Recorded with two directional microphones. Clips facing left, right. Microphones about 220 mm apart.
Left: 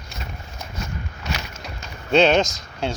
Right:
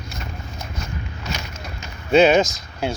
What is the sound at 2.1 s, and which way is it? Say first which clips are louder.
Speech: right 2 dB; 5° right (ahead or behind).